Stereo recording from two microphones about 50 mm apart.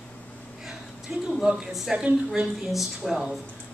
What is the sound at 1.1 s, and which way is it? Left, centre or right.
Speech, centre.